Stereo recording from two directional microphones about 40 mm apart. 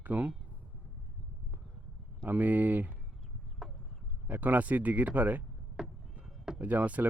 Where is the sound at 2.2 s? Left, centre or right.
Right.